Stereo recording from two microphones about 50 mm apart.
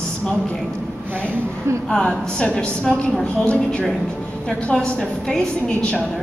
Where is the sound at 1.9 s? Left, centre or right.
Centre.